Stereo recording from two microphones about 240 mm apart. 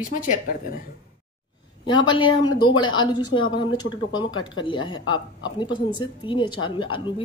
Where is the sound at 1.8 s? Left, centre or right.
Centre.